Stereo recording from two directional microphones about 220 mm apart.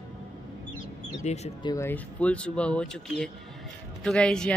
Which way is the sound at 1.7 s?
10° left (ahead or behind).